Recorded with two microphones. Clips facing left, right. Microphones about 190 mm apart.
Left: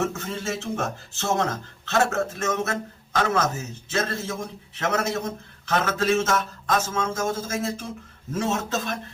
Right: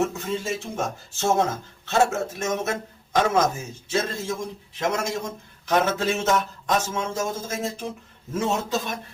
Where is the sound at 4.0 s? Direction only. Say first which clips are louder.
Right 1 dB; 15° right (ahead or behind).